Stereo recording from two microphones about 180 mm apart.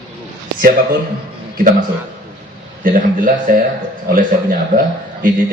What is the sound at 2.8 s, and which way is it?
A man's voice, 50° right (ahead or behind).